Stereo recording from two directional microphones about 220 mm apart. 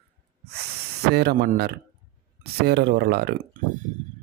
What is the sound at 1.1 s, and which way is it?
A man's voice, 45° right (ahead or behind).